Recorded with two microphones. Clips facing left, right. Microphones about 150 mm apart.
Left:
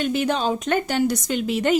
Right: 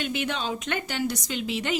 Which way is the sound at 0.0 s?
40° left (ahead or behind).